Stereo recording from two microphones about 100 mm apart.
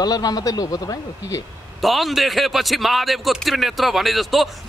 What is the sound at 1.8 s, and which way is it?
A man's voice, centre (ahead or behind).